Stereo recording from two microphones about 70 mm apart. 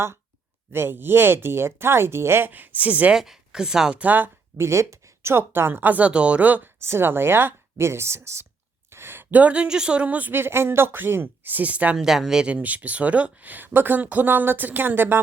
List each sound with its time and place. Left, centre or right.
0.7 s speech: right
2.5 s speech: right
3.2 s speech: centre; by 4.3 s right
4.5 s speech: right
6.8 s speech: right
8.9 s a sound: right
9.3 s speech: centre
11.9 s speech: centre
12.5 s speech: right